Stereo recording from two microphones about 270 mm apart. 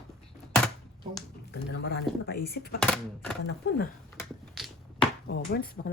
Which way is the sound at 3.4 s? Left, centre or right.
Left.